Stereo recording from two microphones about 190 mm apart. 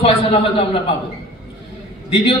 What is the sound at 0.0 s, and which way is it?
Speech, 30° left (ahead or behind).